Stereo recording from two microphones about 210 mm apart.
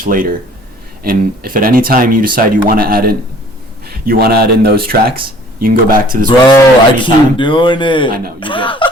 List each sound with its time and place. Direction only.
0.0 s speech: 40° right (ahead or behind)
6.2 s speech: 20° left (ahead or behind)